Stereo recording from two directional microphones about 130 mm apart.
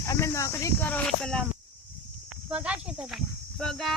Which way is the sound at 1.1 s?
5° left (ahead or behind).